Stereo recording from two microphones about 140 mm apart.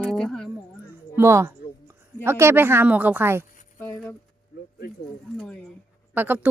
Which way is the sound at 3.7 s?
15° left (ahead or behind).